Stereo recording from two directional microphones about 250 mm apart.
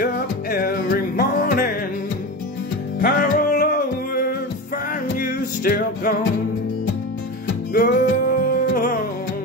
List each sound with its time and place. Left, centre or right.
0.0 s music: left
3.0 s music: left
7.7 s music: left